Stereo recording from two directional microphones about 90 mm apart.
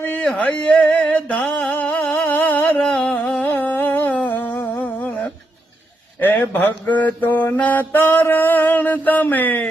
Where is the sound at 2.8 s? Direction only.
10° left (ahead or behind).